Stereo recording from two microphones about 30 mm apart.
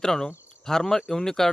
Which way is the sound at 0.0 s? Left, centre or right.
Centre.